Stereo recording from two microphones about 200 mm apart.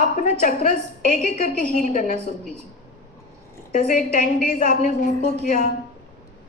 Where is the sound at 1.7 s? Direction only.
40° left (ahead or behind).